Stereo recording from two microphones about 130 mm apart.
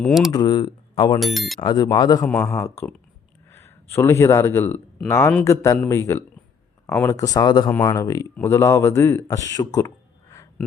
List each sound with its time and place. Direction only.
0.0 s speech: centre (ahead or behind)
0.3 s speech: 30° left (ahead or behind)
1.2 s speech: centre (ahead or behind)
1.6 s speech: 35° left (ahead or behind)
2.2 s speech: 10° left (ahead or behind)
2.5 s speech: 20° left (ahead or behind)